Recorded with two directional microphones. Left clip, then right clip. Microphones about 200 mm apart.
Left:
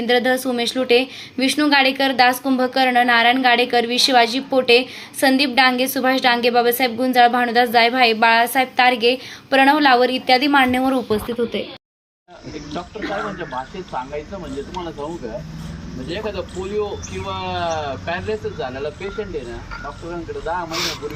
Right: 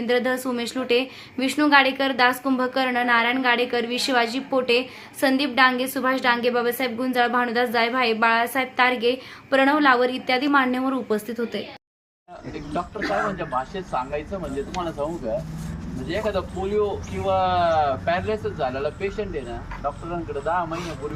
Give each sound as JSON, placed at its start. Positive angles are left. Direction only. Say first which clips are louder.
{"t": 0.0, "sound": "speech", "louder": "left 5 dB", "side_deg": 5}
{"t": 11.3, "sound": "a man's voice", "louder": "left 6 dB", "side_deg": -5}
{"t": 13.0, "sound": "a man's voice", "louder": "even", "side_deg": -15}
{"t": 16.0, "sound": "speech", "louder": "right 1 dB", "side_deg": -40}